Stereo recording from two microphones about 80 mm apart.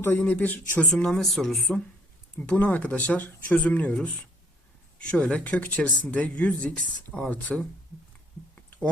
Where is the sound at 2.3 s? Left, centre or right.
Centre.